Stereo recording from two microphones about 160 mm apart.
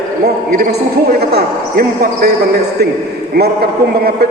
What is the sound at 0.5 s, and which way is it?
Speech, 65° right (ahead or behind).